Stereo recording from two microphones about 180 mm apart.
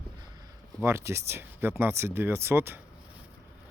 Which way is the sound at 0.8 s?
15° right (ahead or behind).